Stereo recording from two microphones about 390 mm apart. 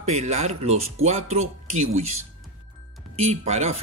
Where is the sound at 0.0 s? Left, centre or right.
Centre.